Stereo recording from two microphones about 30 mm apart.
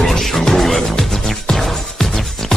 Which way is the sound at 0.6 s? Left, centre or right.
Centre.